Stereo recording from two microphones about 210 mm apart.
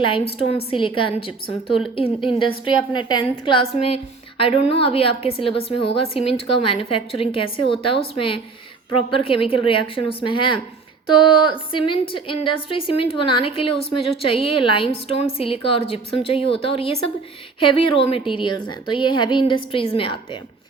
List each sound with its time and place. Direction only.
0.3 s a woman's voice: 25° left (ahead or behind)